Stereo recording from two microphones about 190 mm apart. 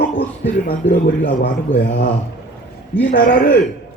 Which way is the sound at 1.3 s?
50° left (ahead or behind).